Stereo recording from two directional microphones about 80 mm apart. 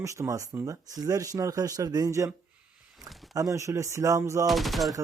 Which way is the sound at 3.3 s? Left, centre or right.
Right.